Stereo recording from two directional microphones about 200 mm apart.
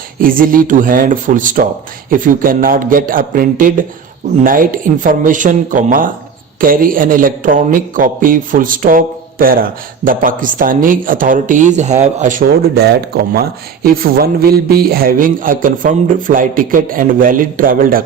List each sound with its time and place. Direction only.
0.2 s speech: 45° right (ahead or behind)